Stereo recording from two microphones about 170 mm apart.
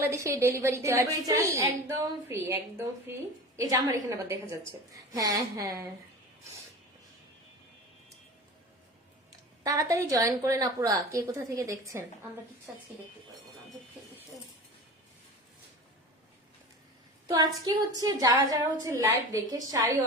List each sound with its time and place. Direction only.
0.0 s a woman's voice: 15° right (ahead or behind)
9.6 s a woman's voice: 20° right (ahead or behind)
17.2 s a woman's voice: 20° right (ahead or behind)